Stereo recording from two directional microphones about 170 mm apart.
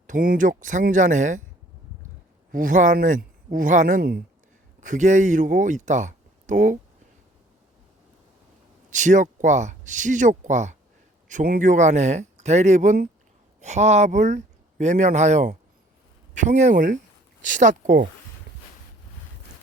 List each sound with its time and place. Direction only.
0.1 s speech: 50° right (ahead or behind)
2.5 s speech: 50° right (ahead or behind)
8.9 s speech: 45° right (ahead or behind)